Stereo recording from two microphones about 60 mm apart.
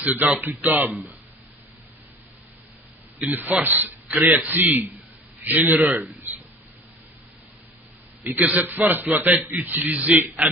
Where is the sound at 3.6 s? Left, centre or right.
Right.